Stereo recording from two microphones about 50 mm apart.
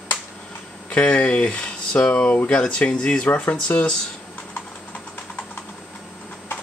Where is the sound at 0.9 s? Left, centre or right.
Left.